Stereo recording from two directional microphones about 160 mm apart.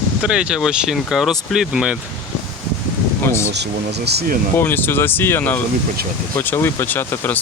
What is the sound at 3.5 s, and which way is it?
Speech, 90° right.